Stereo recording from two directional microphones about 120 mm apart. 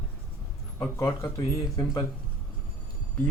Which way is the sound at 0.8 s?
25° left (ahead or behind).